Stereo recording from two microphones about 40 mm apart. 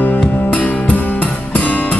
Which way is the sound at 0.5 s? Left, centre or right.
Left.